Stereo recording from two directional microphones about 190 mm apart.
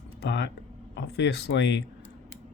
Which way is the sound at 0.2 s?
70° left (ahead or behind).